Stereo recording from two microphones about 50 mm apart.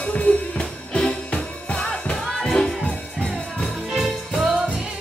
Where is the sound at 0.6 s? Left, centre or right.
Centre.